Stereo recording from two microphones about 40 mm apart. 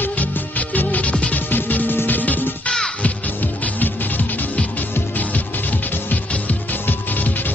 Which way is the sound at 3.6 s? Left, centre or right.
Left.